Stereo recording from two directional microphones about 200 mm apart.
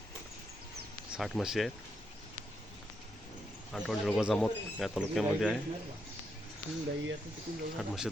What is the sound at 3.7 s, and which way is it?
Speech, centre (ahead or behind).